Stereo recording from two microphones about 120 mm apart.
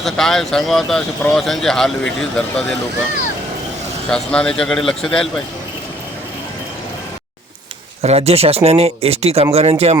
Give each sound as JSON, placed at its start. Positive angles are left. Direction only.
{"t": 0.0, "sound": "speech", "side_deg": 5}
{"t": 4.1, "sound": "speech", "side_deg": 5}
{"t": 8.0, "sound": "speech", "side_deg": -60}